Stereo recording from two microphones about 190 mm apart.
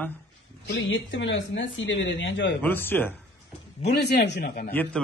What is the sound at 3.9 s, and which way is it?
Speech, 60° left (ahead or behind).